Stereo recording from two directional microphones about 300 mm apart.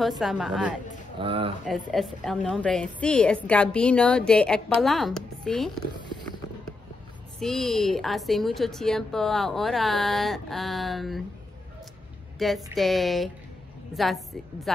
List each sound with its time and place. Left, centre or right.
0.2 s a woman's voice: centre
1.1 s speech: centre
1.7 s a woman's voice: centre
7.3 s a woman's voice: centre
12.4 s a woman's voice: centre